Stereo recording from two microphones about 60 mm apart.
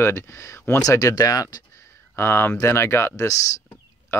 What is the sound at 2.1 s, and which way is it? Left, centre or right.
Speech, left.